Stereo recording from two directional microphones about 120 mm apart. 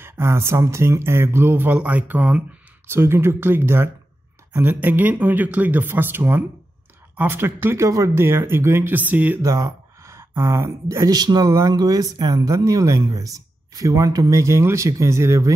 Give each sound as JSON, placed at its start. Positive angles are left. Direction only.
{"t": 0.0, "sound": "speech", "side_deg": -20}
{"t": 9.4, "sound": "speech", "side_deg": -30}